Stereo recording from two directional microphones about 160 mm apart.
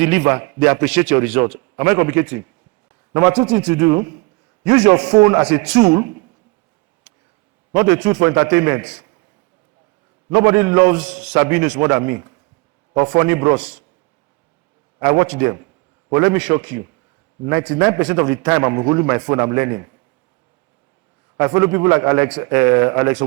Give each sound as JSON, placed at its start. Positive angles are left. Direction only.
{"t": 0.0, "sound": "a man's voice", "side_deg": -10}
{"t": 3.5, "sound": "a man's voice", "side_deg": -15}
{"t": 7.7, "sound": "a man's voice", "side_deg": -10}
{"t": 10.2, "sound": "a man's voice", "side_deg": -15}
{"t": 15.0, "sound": "a man's voice", "side_deg": -15}
{"t": 21.3, "sound": "a man's voice", "side_deg": -10}